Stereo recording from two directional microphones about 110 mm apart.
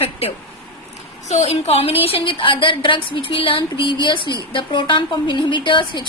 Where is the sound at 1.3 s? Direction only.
75° left (ahead or behind).